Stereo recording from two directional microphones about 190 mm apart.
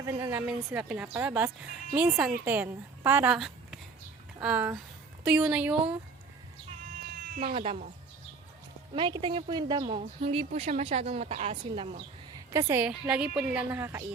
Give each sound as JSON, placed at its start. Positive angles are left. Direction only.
{"t": 0.0, "sound": "a woman's voice", "side_deg": -15}
{"t": 7.4, "sound": "speech", "side_deg": -30}
{"t": 9.0, "sound": "speech", "side_deg": -25}
{"t": 12.5, "sound": "a woman's voice", "side_deg": -15}
{"t": 12.9, "sound": "a woman's voice", "side_deg": -5}